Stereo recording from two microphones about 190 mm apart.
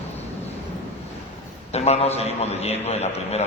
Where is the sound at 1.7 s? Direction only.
35° left (ahead or behind).